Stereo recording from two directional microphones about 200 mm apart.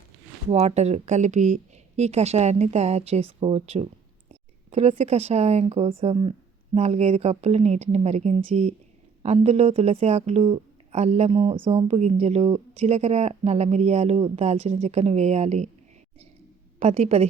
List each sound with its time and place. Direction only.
0.4 s speech: 35° right (ahead or behind)
16.8 s speech: 30° right (ahead or behind)